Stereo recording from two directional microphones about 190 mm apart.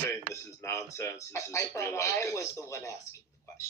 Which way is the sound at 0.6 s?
15° left (ahead or behind).